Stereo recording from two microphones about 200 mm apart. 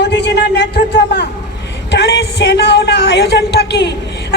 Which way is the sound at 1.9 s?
60° left (ahead or behind).